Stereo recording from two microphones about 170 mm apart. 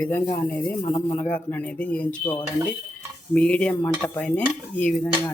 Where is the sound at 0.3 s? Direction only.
10° left (ahead or behind).